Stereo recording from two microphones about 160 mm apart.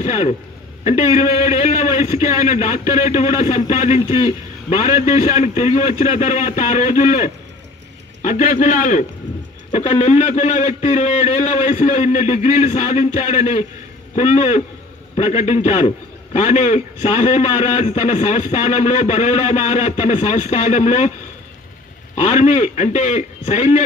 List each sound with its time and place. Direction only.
0.0 s a man's voice: 45° left (ahead or behind)
22.1 s a man's voice: 45° left (ahead or behind)